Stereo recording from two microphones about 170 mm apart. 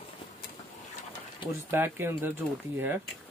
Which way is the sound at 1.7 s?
15° right (ahead or behind).